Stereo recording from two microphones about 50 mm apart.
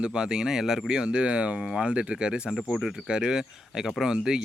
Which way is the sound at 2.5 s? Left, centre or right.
Centre.